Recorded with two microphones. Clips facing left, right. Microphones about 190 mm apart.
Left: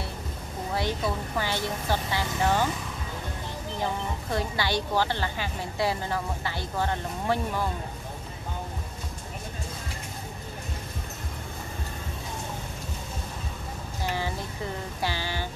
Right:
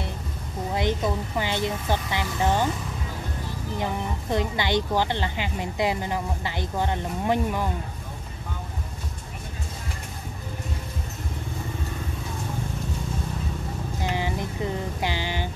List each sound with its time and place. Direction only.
0.7 s a woman's voice: 20° right (ahead or behind)
3.8 s speech: 20° right (ahead or behind)
14.0 s a sound: 15° right (ahead or behind)